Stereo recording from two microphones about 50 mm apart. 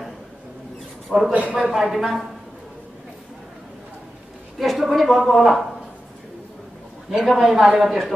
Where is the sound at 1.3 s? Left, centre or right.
Right.